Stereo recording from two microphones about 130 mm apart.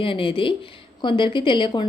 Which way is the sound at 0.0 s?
40° left (ahead or behind).